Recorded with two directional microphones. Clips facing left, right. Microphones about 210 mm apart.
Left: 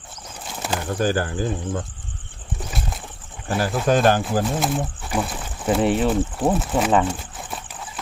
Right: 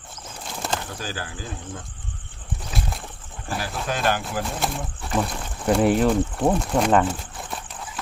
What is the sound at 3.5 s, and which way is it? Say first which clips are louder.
Speech: left 9 dB; 45° left (ahead or behind).